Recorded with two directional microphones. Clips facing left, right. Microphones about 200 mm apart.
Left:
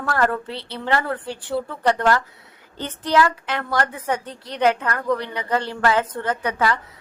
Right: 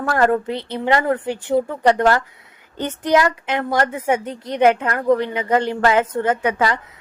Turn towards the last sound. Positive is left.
turn(degrees=-15)  # may be behind; listen again after turning